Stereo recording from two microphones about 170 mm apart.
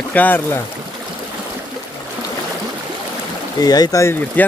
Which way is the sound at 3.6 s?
25° left (ahead or behind).